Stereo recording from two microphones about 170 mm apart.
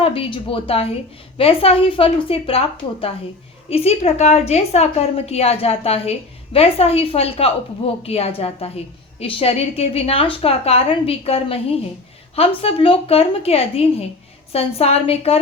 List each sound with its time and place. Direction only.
0.0 s a woman's voice: 30° left (ahead or behind)